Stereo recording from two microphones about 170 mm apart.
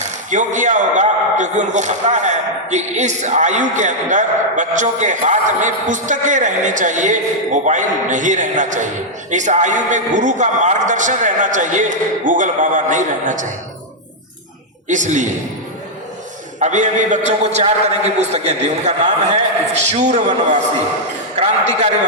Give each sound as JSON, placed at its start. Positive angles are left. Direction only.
{"t": 0.0, "sound": "speech", "side_deg": -45}
{"t": 14.8, "sound": "speech", "side_deg": -45}
{"t": 16.6, "sound": "a man's voice", "side_deg": -45}